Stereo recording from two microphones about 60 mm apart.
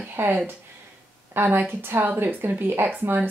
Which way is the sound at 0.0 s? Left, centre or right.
Right.